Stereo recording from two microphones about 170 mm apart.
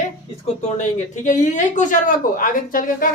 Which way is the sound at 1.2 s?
45° left (ahead or behind).